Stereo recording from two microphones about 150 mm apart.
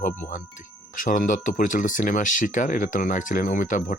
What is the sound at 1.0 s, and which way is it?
Speech, 60° left (ahead or behind).